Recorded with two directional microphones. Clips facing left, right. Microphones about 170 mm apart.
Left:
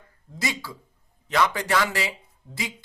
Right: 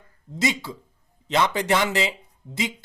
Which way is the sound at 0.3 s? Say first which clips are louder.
Right 5 dB; 20° right (ahead or behind).